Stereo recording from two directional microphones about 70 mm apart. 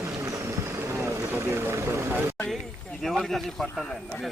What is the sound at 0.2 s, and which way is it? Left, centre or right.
Vehicle, right.